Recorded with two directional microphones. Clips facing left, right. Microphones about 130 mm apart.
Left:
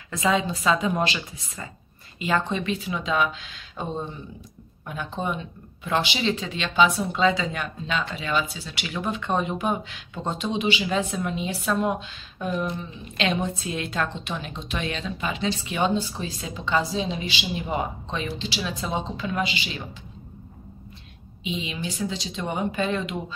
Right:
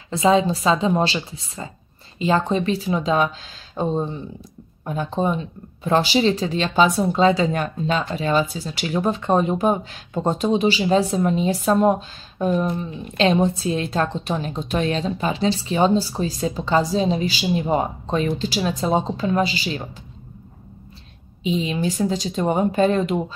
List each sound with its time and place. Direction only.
0.1 s speech: 30° right (ahead or behind)
21.4 s speech: 40° right (ahead or behind)